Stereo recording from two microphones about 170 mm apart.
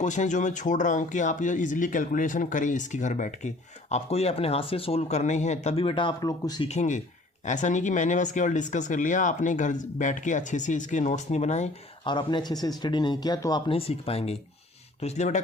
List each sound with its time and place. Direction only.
0.0 s speech: 45° left (ahead or behind); by 6.7 s 25° left (ahead or behind)
6.7 s speech: 45° left (ahead or behind)
12.0 s a man's voice: 25° left (ahead or behind)